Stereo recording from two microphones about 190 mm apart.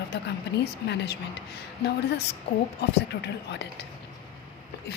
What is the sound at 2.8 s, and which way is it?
A woman's voice, 60° left (ahead or behind).